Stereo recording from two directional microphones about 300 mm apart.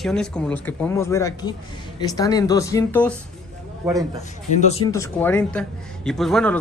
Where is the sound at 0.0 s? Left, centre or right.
Centre.